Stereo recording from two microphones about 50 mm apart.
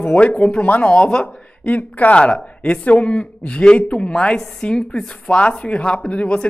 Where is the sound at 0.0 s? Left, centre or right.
Left.